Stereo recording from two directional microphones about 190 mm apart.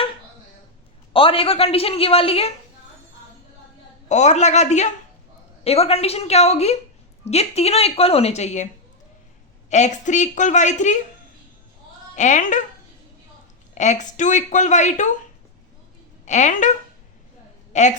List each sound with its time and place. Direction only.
1.1 s a woman's voice: 30° left (ahead or behind)
4.1 s a woman's voice: 40° left (ahead or behind)
12.1 s a woman's voice: 40° left (ahead or behind)
13.7 s a woman's voice: 40° left (ahead or behind)
16.2 s a woman's voice: 40° left (ahead or behind)
17.7 s a sound: 40° left (ahead or behind)